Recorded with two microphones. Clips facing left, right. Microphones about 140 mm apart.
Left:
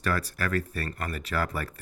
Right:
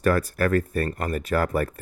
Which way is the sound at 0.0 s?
50° right (ahead or behind).